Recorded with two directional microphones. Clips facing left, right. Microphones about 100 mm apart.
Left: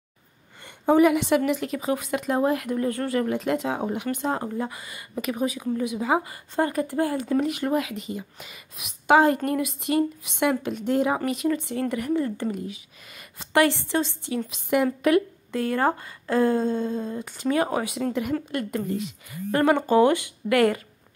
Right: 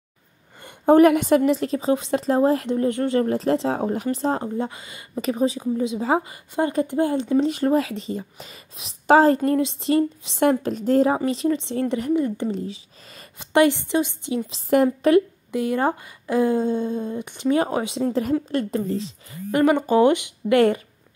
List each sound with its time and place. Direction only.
0.6 s a woman's voice: 50° right (ahead or behind)
1.4 s a woman's voice: 30° right (ahead or behind)
12.5 s speech: 30° right (ahead or behind)
13.4 s speech: 20° right (ahead or behind)
14.5 s speech: 35° right (ahead or behind)
15.5 s a woman's voice: 15° right (ahead or behind)
19.5 s speech: 15° right (ahead or behind)